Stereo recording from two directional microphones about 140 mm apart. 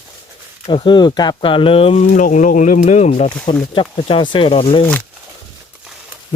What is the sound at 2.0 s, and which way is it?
Speech, 70° left (ahead or behind).